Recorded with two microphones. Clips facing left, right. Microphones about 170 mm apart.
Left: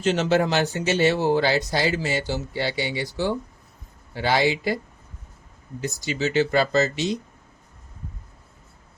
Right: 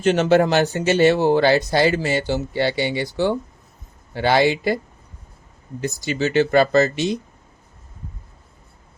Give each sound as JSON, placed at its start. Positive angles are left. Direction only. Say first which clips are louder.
{"t": 0.0, "sound": "speech", "louder": "right 5 dB", "side_deg": -55}
{"t": 5.8, "sound": "speech", "louder": "right 3 dB", "side_deg": -55}